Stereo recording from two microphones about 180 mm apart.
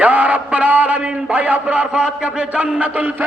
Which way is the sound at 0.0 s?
10° right (ahead or behind).